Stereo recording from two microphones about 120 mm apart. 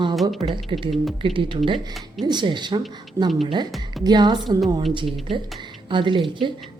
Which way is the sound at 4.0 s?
35° right (ahead or behind).